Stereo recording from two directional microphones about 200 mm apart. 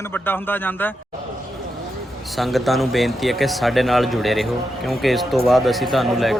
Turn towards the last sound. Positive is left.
turn(degrees=0)  # may be behind; listen again after turning